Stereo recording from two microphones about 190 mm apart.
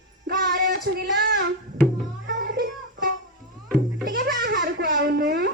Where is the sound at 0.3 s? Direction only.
55° right (ahead or behind).